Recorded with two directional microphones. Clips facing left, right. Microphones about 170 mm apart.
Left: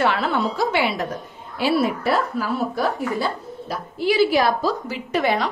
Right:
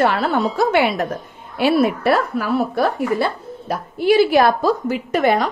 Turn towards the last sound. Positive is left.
turn(degrees=-50)  # may be behind; listen again after turning